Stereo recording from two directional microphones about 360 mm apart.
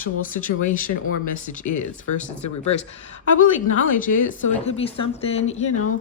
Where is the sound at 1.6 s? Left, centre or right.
Left.